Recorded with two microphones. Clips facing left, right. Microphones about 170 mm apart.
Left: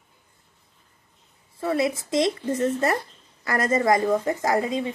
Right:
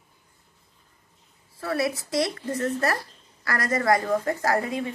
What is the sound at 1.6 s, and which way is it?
Speech, 20° left (ahead or behind).